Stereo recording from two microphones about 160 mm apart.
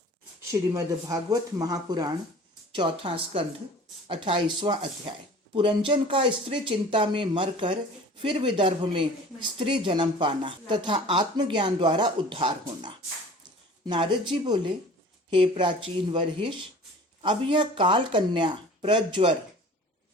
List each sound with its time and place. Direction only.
0.7 s speech: 20° right (ahead or behind)